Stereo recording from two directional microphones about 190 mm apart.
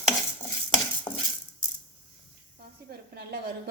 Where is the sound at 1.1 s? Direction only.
20° left (ahead or behind).